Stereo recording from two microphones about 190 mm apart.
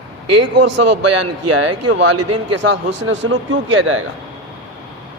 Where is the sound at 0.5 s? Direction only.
65° right (ahead or behind).